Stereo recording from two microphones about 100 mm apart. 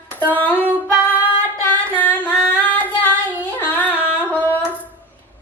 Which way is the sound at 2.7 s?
15° left (ahead or behind).